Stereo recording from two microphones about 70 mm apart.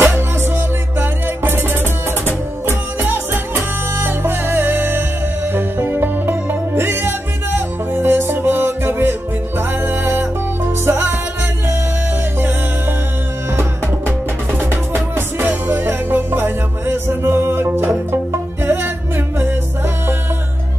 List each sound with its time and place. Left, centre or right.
0.0 s music: right
15.1 s music: right